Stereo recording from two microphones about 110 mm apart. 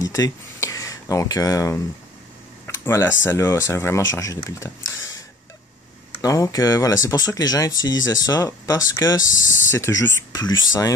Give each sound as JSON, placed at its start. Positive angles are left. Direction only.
{"t": 0.0, "sound": "speech", "side_deg": 30}
{"t": 6.2, "sound": "speech", "side_deg": 30}